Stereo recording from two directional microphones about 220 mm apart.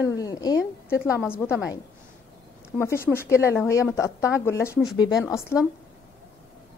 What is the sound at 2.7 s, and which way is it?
A woman's voice, 5° left (ahead or behind).